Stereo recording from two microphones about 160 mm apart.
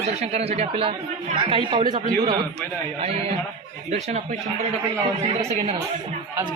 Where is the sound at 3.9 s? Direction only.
45° right (ahead or behind).